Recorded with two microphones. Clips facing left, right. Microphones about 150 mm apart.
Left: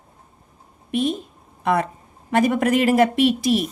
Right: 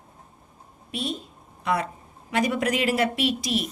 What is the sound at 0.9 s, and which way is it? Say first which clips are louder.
A woman's voice: left 9 dB; 50° left (ahead or behind).